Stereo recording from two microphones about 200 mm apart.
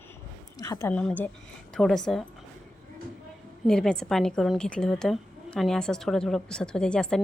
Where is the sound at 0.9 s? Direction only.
5° left (ahead or behind).